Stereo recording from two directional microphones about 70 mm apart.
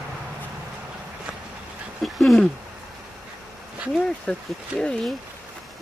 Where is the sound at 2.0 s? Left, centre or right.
Centre.